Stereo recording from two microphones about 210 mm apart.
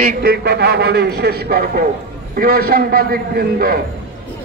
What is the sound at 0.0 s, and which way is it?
A man's voice, 45° right (ahead or behind).